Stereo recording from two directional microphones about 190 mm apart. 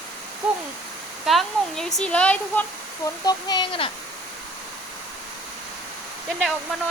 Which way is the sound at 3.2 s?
25° left (ahead or behind).